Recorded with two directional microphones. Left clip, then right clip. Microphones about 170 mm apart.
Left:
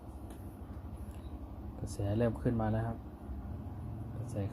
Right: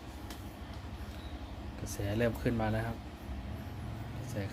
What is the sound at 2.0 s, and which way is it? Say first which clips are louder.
Speech: right 1 dB; 15° left (ahead or behind).